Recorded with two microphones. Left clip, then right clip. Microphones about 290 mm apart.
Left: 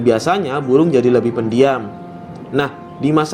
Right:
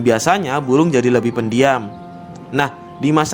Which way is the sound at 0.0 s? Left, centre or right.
Right.